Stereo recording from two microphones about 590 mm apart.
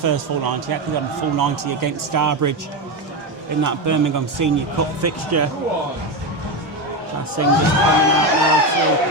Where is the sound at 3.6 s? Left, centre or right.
Right.